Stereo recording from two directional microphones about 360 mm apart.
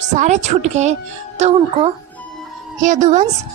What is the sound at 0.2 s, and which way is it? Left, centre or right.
Speech, centre.